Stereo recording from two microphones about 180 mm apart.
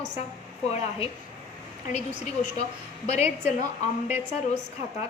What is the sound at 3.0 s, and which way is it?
A woman's voice, 40° left (ahead or behind).